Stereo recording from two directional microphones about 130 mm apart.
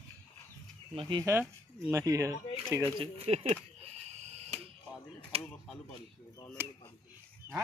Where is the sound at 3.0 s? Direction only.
55° right (ahead or behind).